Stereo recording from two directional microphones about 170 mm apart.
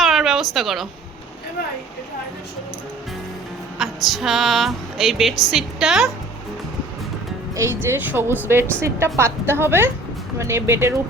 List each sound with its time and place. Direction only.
0.0 s a sound: centre (ahead or behind)
3.8 s speech: centre (ahead or behind)
7.5 s a woman's voice: 15° right (ahead or behind)